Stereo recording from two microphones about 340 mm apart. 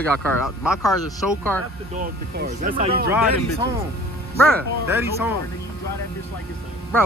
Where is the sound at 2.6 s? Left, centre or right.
Right.